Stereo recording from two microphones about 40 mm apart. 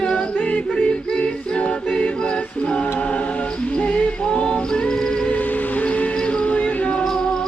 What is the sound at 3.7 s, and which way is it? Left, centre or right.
Music, left.